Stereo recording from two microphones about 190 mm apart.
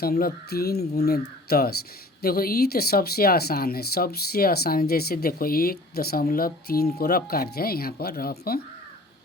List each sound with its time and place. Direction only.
0.0 s speech: 50° left (ahead or behind)